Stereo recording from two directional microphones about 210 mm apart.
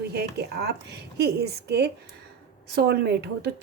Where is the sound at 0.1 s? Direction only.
50° right (ahead or behind).